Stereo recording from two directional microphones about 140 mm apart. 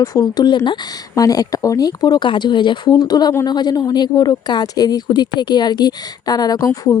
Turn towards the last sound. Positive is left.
turn(degrees=25)  # may be behind; listen again after turning